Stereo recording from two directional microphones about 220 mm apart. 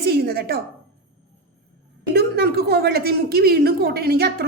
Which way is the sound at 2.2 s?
45° right (ahead or behind).